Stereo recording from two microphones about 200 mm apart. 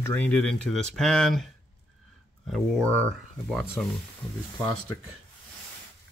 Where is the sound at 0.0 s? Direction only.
10° left (ahead or behind).